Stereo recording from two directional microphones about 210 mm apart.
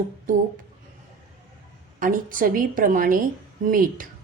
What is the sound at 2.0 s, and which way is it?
A woman's voice, 40° right (ahead or behind).